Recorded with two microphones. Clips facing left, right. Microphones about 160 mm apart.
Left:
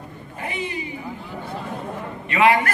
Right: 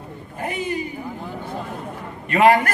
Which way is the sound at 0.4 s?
45° right (ahead or behind).